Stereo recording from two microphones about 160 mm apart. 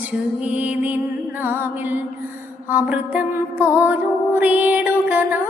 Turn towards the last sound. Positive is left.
turn(degrees=-10)  # may be behind; listen again after turning